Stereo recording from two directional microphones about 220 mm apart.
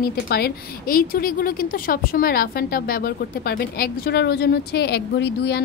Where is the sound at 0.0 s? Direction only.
45° left (ahead or behind).